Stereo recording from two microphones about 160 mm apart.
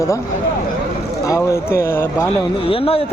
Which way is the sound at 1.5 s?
15° left (ahead or behind).